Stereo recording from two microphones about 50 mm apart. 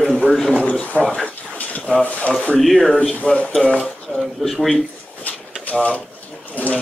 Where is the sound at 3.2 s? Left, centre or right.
Left.